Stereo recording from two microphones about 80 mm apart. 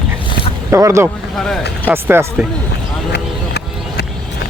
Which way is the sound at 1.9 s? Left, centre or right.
Right.